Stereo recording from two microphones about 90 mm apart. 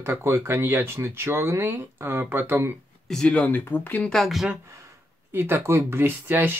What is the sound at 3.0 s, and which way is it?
Speech, 10° left (ahead or behind).